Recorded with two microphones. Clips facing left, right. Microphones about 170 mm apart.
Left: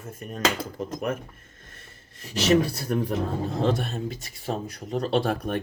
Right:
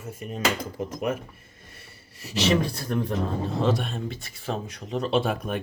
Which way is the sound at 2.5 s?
10° left (ahead or behind).